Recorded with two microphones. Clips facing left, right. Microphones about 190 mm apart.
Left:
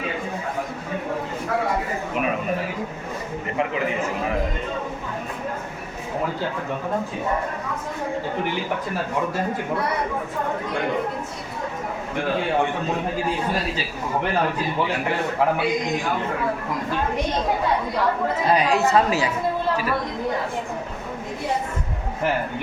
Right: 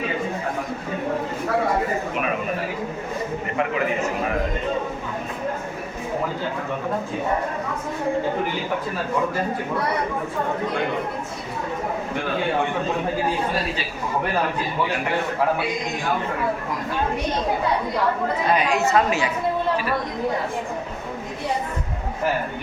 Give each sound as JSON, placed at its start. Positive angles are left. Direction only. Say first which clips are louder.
{"t": 18.5, "sound": "a woman's voice", "louder": "left 1 dB", "side_deg": 35}